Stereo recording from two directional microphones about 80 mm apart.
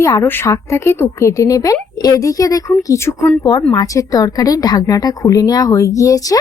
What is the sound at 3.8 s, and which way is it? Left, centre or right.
A woman's voice, left.